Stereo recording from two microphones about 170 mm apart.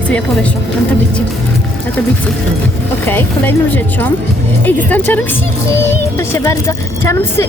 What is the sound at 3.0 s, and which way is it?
Speech, 10° left (ahead or behind).